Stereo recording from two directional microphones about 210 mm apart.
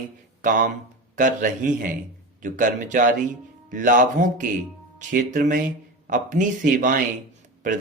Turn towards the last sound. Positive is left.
turn(degrees=-40)  # may be behind; listen again after turning